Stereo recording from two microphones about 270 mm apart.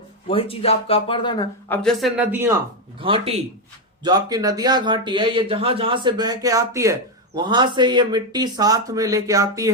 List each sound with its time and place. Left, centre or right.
0.3 s speech: left; by 2.6 s centre
3.0 s speech: right